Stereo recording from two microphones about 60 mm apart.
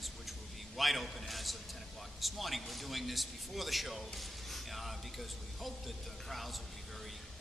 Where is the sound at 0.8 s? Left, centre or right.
Centre.